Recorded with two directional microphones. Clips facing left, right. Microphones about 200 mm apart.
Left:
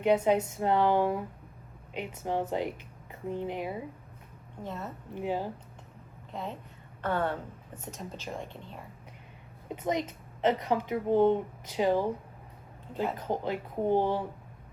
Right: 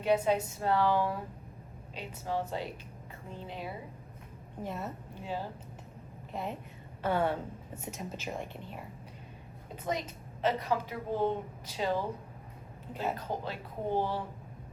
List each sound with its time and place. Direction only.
0.0 s a woman's voice: 20° left (ahead or behind)
4.6 s a woman's voice: 10° right (ahead or behind)
5.1 s speech: 15° left (ahead or behind)
7.0 s a woman's voice: 10° right (ahead or behind)
9.7 s a woman's voice: 20° left (ahead or behind)